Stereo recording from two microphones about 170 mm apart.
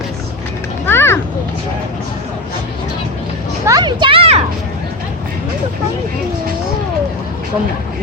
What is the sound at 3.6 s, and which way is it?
Speech, 25° right (ahead or behind).